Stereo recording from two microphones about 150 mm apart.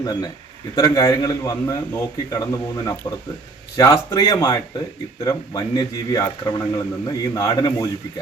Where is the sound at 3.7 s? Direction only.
20° left (ahead or behind).